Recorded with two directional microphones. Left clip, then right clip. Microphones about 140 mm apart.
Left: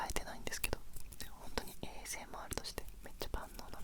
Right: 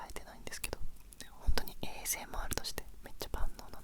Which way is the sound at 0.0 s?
10° left (ahead or behind).